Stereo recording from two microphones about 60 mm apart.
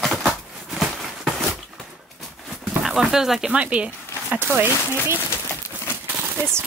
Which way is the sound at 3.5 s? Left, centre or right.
Right.